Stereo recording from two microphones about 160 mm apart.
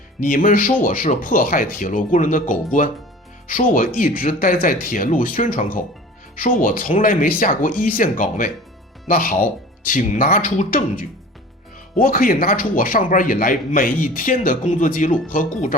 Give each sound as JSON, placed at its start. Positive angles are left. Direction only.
{"t": 0.2, "sound": "speech", "side_deg": 55}